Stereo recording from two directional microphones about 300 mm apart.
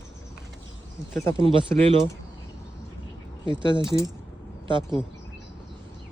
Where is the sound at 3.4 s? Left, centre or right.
Centre.